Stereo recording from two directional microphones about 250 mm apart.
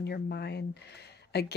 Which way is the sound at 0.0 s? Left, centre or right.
Left.